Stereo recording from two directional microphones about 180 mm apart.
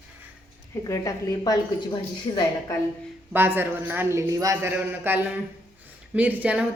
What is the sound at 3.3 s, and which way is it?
A man's voice, 10° right (ahead or behind).